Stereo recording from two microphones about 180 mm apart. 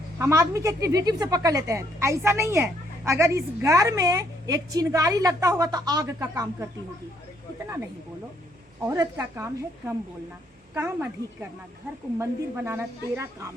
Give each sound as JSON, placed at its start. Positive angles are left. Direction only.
{"t": 0.2, "sound": "speech", "side_deg": -15}
{"t": 8.9, "sound": "speech", "side_deg": -20}